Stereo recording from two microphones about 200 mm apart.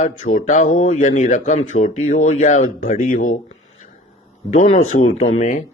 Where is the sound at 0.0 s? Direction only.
40° left (ahead or behind).